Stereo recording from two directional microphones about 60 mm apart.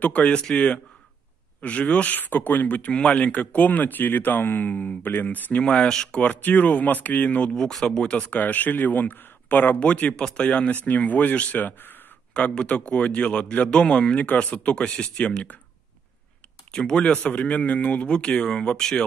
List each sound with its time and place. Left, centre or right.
0.0 s speech: left
5.6 s speech: centre
6.2 s speech: left
7.5 s speech: centre
8.4 s speech: left
12.4 s speech: left
16.7 s speech: centre